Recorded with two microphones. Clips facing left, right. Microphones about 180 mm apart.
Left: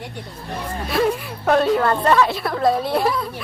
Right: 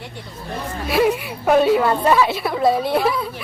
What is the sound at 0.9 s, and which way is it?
A woman's voice, 5° right (ahead or behind).